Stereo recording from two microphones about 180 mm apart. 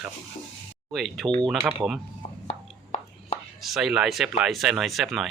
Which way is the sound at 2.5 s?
35° left (ahead or behind).